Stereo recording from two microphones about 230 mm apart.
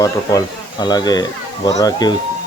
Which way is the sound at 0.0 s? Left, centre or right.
Centre.